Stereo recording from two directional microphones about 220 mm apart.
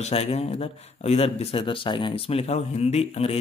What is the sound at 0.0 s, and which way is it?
Speech, 30° left (ahead or behind).